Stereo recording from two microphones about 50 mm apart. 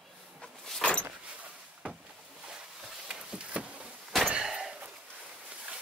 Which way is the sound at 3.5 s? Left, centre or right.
Right.